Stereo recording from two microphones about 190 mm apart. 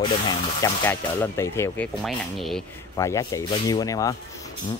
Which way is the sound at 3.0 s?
15° left (ahead or behind).